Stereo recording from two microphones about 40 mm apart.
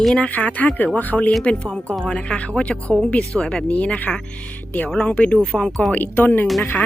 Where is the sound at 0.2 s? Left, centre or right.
Left.